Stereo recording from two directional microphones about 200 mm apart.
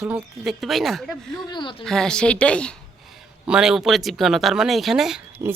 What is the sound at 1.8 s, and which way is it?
Speech, 5° left (ahead or behind).